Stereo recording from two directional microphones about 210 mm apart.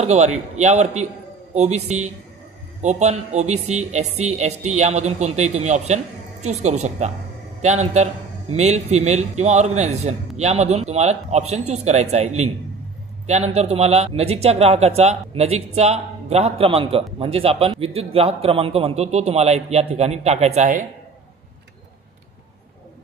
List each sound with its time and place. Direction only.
0.0 s a man's voice: 30° right (ahead or behind)